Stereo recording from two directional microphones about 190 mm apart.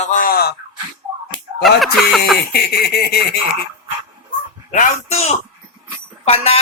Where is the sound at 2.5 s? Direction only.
55° left (ahead or behind).